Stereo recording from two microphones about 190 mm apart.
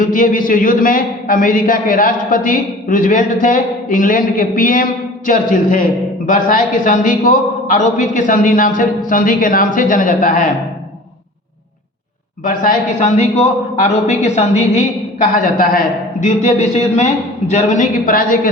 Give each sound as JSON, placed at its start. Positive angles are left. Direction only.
{"t": 0.0, "sound": "a man's voice", "side_deg": 45}
{"t": 13.1, "sound": "a man's voice", "side_deg": 35}